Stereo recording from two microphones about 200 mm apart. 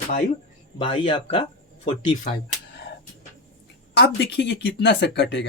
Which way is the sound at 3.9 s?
60° left (ahead or behind).